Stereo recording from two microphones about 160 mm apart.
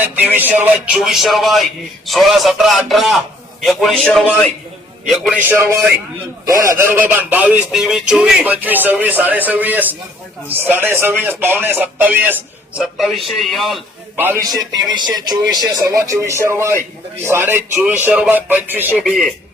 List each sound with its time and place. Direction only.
0.0 s speech: 10° right (ahead or behind)
0.9 s a man's voice: centre (ahead or behind)
5.5 s speech: 15° right (ahead or behind)
12.8 s a man's voice: centre (ahead or behind)
14.7 s speech: 25° right (ahead or behind)
19.0 s a man's voice: centre (ahead or behind)